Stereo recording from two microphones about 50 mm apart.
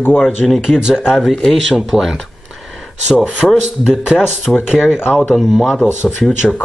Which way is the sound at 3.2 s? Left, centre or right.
Centre.